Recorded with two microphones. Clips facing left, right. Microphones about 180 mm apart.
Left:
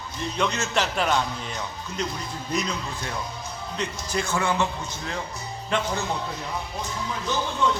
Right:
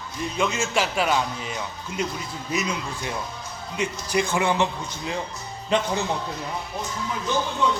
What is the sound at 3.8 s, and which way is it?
A man's voice, 15° right (ahead or behind).